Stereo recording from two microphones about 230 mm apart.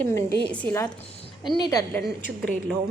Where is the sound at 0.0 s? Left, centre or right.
Centre.